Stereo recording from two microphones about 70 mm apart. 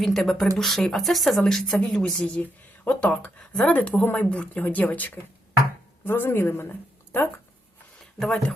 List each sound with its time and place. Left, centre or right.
0.0 s a woman's voice: centre; by 7.3 s left